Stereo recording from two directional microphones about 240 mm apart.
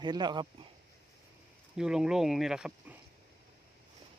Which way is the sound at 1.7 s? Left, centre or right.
Centre.